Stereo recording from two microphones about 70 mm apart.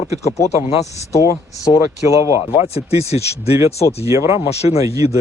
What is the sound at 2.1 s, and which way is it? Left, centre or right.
Speech, right.